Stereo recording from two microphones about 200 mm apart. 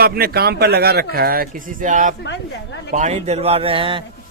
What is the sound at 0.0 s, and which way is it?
A man's voice, 50° right (ahead or behind).